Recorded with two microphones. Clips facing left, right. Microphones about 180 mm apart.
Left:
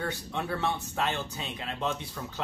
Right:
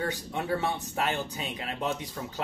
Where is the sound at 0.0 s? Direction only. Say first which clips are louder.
Right 2 dB; 15° right (ahead or behind).